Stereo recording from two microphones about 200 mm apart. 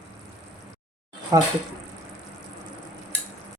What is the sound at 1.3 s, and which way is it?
Speech, 15° right (ahead or behind).